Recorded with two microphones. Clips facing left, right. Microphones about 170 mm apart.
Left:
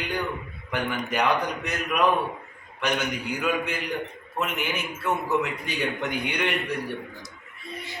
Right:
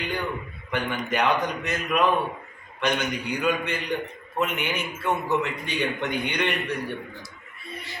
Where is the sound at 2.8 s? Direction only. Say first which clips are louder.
Right 1 dB; 5° left (ahead or behind).